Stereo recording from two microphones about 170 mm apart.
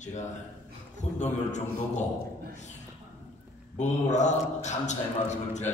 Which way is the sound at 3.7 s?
45° left (ahead or behind).